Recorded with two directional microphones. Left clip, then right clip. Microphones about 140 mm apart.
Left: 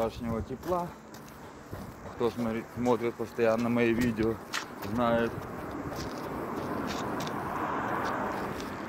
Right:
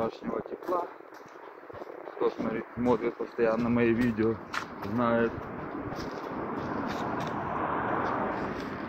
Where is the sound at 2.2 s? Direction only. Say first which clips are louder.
Right 1 dB; 35° left (ahead or behind).